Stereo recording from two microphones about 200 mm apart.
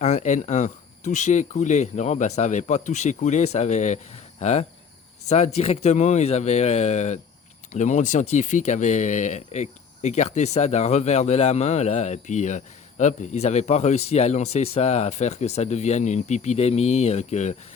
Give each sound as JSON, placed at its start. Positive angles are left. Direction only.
{"t": 0.0, "sound": "speech", "side_deg": 35}